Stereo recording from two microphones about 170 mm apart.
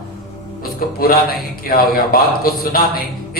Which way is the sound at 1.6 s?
60° left (ahead or behind).